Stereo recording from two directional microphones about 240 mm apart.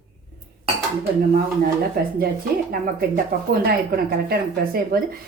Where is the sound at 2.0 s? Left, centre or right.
Right.